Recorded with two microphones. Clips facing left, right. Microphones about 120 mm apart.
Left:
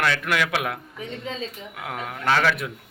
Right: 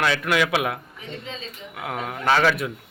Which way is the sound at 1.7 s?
5° right (ahead or behind).